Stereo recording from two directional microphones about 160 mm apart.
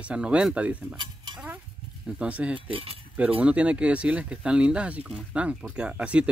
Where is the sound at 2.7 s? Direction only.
40° right (ahead or behind).